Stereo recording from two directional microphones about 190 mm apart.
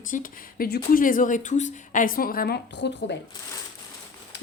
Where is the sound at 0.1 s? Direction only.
50° left (ahead or behind); by 3.2 s 65° left (ahead or behind).